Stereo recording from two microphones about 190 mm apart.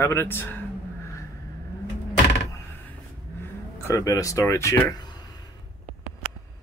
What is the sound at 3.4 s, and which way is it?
Speech, 15° left (ahead or behind).